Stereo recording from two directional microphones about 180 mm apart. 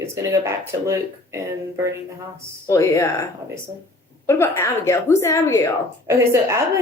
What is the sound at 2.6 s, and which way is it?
Speech, 15° left (ahead or behind).